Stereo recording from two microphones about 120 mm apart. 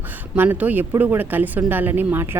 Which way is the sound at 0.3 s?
15° right (ahead or behind).